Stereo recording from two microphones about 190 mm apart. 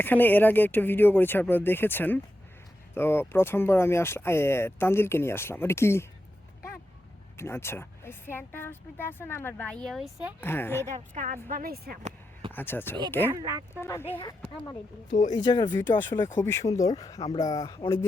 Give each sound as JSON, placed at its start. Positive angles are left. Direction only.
{"t": 0.0, "sound": "speech", "side_deg": 10}
{"t": 7.3, "sound": "speech", "side_deg": 15}
{"t": 10.4, "sound": "speech", "side_deg": 10}
{"t": 10.9, "sound": "speech", "side_deg": -40}
{"t": 12.5, "sound": "speech", "side_deg": 10}
{"t": 13.3, "sound": "speech", "side_deg": -15}
{"t": 14.2, "sound": "speech", "side_deg": 15}
{"t": 15.1, "sound": "speech", "side_deg": 40}
{"t": 15.4, "sound": "speech", "side_deg": 20}